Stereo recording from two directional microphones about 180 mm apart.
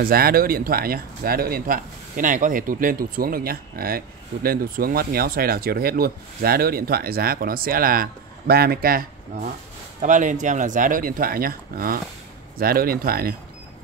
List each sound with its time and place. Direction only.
0.0 s speech: 55° right (ahead or behind)